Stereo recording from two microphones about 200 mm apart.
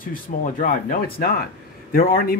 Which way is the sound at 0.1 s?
40° left (ahead or behind).